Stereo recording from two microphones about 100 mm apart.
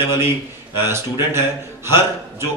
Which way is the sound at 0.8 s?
25° right (ahead or behind).